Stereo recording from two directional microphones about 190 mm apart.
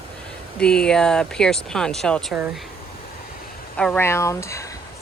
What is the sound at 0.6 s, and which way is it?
Speech, 5° left (ahead or behind).